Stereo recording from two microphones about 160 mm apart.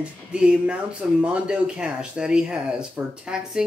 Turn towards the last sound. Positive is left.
turn(degrees=-5)  # may be behind; listen again after turning